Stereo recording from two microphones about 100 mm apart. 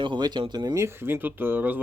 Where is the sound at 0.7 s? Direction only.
25° right (ahead or behind).